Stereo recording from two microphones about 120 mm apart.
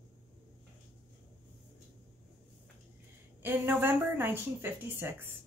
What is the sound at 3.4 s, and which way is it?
Speech, 15° right (ahead or behind).